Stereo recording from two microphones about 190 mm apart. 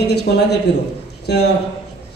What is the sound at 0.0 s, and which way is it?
A woman's voice, 60° left (ahead or behind).